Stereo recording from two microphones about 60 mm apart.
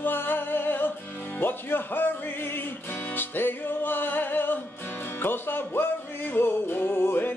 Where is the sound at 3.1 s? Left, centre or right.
Left.